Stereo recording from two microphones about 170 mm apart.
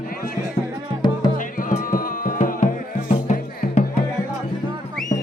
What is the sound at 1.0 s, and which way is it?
Music, 25° left (ahead or behind).